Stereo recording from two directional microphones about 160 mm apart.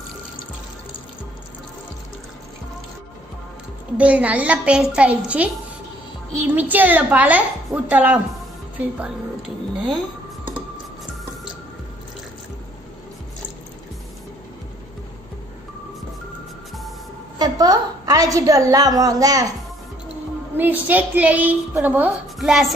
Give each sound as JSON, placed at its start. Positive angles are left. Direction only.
{"t": 3.9, "sound": "a woman's voice", "side_deg": -10}
{"t": 17.4, "sound": "a woman's voice", "side_deg": -25}
{"t": 20.5, "sound": "a woman's voice", "side_deg": -10}